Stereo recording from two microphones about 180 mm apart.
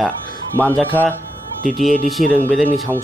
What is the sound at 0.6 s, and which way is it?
Speech, 5° left (ahead or behind).